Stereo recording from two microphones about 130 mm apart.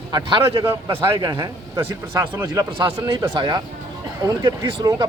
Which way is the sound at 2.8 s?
35° right (ahead or behind).